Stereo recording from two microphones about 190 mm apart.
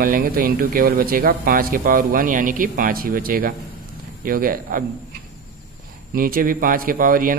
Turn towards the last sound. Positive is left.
turn(degrees=-45)  # may be behind; listen again after turning